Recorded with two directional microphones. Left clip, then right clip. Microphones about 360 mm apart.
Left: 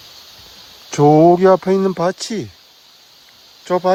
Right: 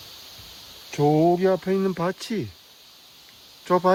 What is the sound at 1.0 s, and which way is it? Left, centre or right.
Speech, left.